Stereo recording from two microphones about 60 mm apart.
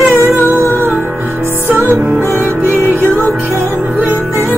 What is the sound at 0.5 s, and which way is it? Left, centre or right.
Music, right.